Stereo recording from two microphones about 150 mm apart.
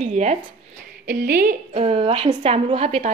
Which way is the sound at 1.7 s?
40° right (ahead or behind).